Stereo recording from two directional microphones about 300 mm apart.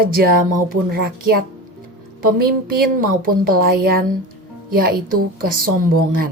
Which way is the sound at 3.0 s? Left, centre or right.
Right.